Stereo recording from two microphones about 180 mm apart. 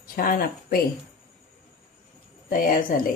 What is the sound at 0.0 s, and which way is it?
Speech, 50° left (ahead or behind).